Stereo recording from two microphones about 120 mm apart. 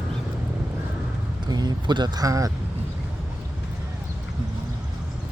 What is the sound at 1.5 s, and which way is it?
Speech, 35° right (ahead or behind).